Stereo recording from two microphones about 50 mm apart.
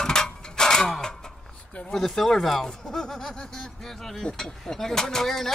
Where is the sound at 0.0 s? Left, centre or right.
Centre.